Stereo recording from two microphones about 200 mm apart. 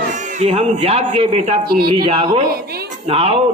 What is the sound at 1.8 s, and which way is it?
Music, 25° right (ahead or behind).